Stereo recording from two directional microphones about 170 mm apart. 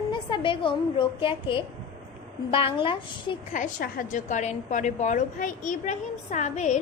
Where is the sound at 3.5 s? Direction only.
50° left (ahead or behind).